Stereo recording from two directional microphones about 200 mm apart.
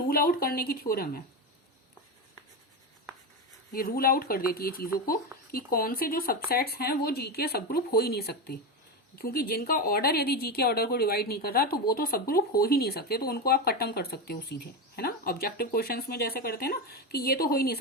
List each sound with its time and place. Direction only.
0.1 s speech: 45° left (ahead or behind)
3.7 s speech: 45° left (ahead or behind)